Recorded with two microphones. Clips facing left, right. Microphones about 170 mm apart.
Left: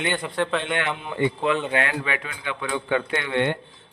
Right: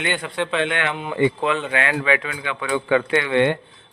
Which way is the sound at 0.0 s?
5° right (ahead or behind).